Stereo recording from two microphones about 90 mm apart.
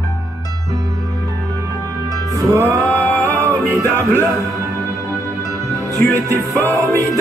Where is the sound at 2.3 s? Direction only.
35° right (ahead or behind).